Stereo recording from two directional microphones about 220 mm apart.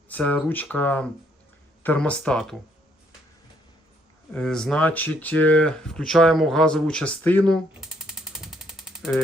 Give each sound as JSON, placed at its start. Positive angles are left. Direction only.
{"t": 0.1, "sound": "speech", "side_deg": 5}
{"t": 4.4, "sound": "speech", "side_deg": 5}